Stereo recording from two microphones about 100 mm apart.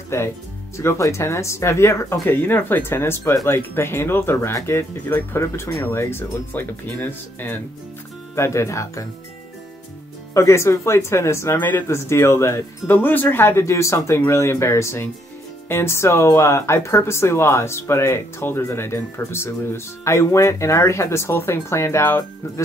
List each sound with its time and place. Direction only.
0.1 s speech: 30° left (ahead or behind)
10.3 s speech: 30° left (ahead or behind)